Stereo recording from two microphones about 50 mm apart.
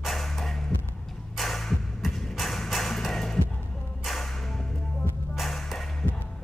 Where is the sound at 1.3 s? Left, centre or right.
Centre.